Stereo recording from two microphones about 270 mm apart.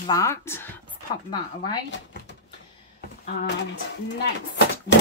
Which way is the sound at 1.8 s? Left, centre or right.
Left.